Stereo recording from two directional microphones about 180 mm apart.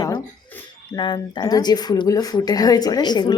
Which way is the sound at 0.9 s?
25° left (ahead or behind).